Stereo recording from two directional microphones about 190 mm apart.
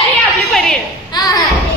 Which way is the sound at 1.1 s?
20° left (ahead or behind).